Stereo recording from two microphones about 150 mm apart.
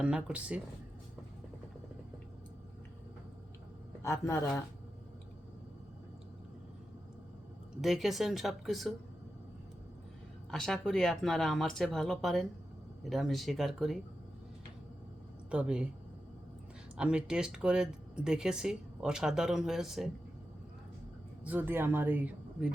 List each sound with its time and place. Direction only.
0.0 s speech: 5° right (ahead or behind)
4.0 s a man's voice: 20° left (ahead or behind)
7.8 s speech: centre (ahead or behind)
10.5 s speech: 5° left (ahead or behind)
15.4 s speech: 5° right (ahead or behind)
17.0 s speech: 5° right (ahead or behind)
21.4 s speech: 10° right (ahead or behind)